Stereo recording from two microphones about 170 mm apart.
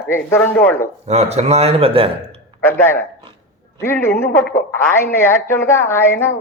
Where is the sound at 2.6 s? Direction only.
10° left (ahead or behind).